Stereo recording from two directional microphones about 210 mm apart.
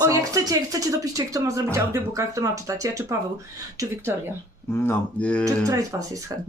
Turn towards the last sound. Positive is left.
turn(degrees=-15)  # may be behind; listen again after turning